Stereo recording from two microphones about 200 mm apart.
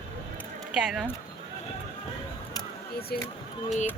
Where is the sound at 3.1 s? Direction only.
50° left (ahead or behind).